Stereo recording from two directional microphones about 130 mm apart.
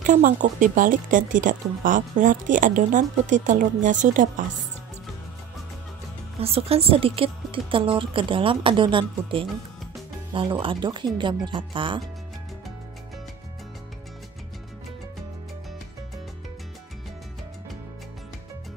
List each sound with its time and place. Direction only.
0.0 s speech: 85° right
6.4 s speech: 50° right (ahead or behind)